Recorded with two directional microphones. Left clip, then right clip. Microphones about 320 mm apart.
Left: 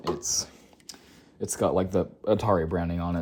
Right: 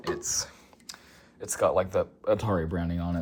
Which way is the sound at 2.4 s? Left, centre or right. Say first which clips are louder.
Left 5 dB; centre.